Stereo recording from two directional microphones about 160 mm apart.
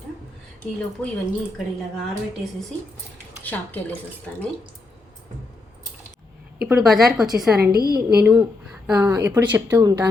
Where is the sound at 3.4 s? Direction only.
10° left (ahead or behind).